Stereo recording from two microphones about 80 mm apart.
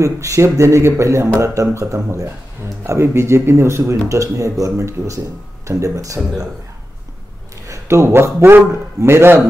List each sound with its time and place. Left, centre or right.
0.0 s speech: right
7.6 s a man's voice: right